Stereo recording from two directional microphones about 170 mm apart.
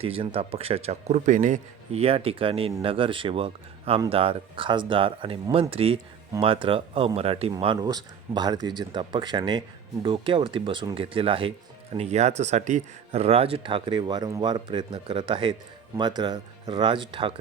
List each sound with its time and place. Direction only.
0.0 s speech: 35° right (ahead or behind)